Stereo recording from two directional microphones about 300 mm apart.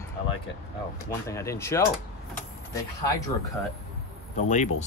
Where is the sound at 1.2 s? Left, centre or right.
Centre.